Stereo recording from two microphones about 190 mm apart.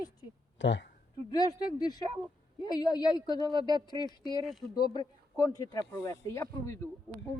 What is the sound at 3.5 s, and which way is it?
Speech, 20° right (ahead or behind).